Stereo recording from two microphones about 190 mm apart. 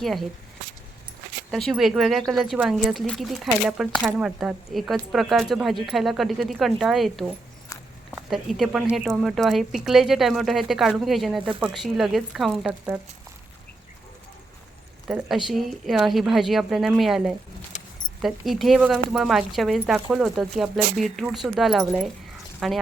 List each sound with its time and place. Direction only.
0.0 s speech: centre (ahead or behind)
1.5 s speech: centre (ahead or behind)
15.0 s speech: centre (ahead or behind)